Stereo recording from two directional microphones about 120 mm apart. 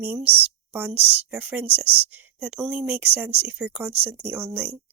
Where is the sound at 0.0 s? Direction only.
15° right (ahead or behind).